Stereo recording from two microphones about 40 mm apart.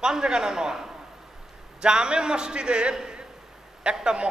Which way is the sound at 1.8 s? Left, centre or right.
Right.